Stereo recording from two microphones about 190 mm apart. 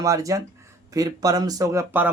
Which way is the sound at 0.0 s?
15° right (ahead or behind).